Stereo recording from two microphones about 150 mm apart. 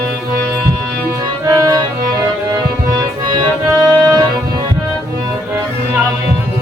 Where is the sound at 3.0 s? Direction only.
30° right (ahead or behind).